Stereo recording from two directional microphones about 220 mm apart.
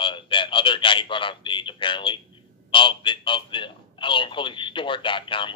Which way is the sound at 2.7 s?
20° left (ahead or behind).